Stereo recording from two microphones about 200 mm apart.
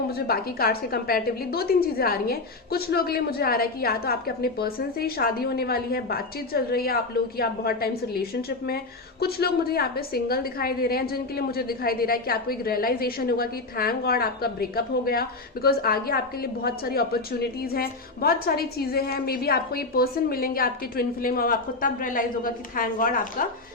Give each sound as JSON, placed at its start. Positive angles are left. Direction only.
{"t": 0.1, "sound": "a woman's voice", "side_deg": 50}